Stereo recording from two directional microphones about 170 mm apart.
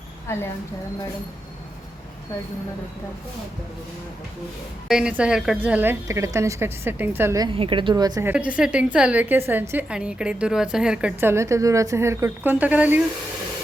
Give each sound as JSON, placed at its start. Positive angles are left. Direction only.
{"t": 4.9, "sound": "a woman's voice", "side_deg": -5}
{"t": 7.5, "sound": "a woman's voice", "side_deg": -30}
{"t": 8.3, "sound": "a woman's voice", "side_deg": -5}